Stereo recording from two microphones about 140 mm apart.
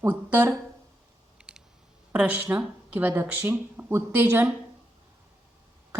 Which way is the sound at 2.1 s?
10° right (ahead or behind).